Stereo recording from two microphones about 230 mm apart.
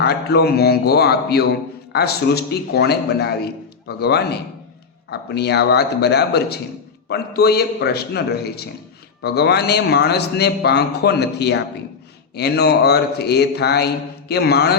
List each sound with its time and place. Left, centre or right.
0.0 s a man's voice: left